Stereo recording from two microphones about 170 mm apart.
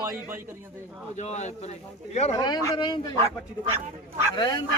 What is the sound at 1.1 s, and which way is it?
Speech, 40° left (ahead or behind).